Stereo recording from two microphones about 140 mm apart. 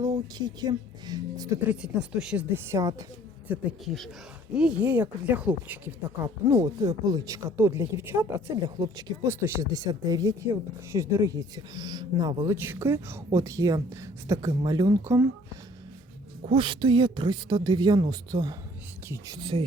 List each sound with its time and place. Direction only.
0.0 s speech: 30° right (ahead or behind)
1.6 s speech: 5° right (ahead or behind)
3.8 s speech: centre (ahead or behind)
4.5 s speech: 10° right (ahead or behind)
16.5 s speech: 35° right (ahead or behind)